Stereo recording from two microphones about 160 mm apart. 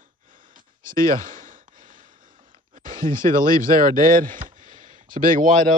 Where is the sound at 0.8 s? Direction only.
60° right (ahead or behind).